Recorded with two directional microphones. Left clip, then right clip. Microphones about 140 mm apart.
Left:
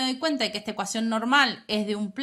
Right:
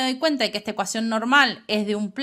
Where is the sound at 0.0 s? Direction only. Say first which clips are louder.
Right 4 dB; 40° right (ahead or behind).